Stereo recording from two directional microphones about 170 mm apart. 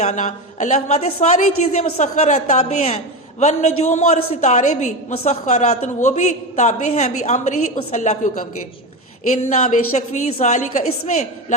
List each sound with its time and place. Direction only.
0.0 s a woman's voice: 45° left (ahead or behind)
9.5 s a woman's voice: 45° left (ahead or behind)